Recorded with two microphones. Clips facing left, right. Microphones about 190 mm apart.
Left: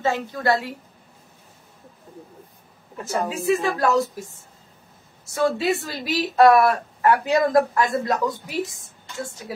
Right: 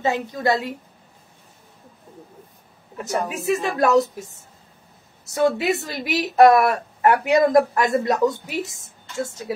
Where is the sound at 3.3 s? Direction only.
20° right (ahead or behind).